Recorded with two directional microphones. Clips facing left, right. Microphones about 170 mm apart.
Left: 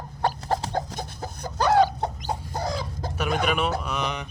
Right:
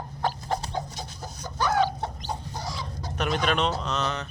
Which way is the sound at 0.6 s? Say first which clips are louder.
Left 4 dB; 90° left.